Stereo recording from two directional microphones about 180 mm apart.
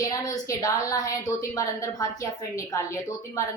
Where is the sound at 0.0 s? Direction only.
20° left (ahead or behind).